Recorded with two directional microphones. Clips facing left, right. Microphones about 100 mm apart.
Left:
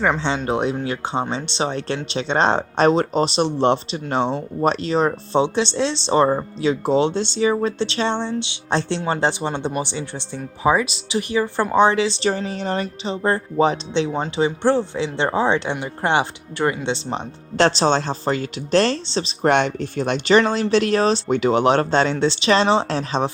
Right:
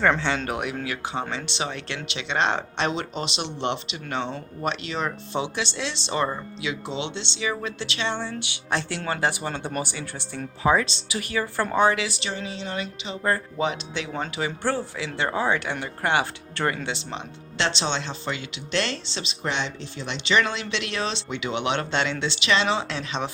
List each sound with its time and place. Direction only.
0.0 s speech: 15° left (ahead or behind)
12.3 s speech: 45° left (ahead or behind)
13.2 s speech: 30° left (ahead or behind)
19.5 s speech: 55° left (ahead or behind); by 23.3 s 35° left (ahead or behind)